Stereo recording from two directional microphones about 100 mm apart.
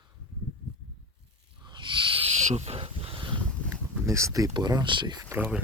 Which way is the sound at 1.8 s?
55° right (ahead or behind).